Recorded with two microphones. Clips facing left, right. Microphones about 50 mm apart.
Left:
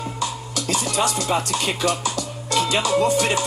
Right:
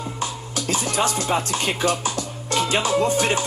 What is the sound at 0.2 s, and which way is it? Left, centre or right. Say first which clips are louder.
Music: left 1 dB; right.